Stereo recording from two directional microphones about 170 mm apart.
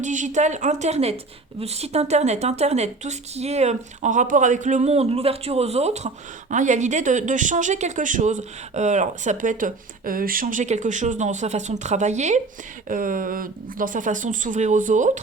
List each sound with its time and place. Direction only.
0.0 s speech: 45° right (ahead or behind)
12.9 s speech: 55° right (ahead or behind)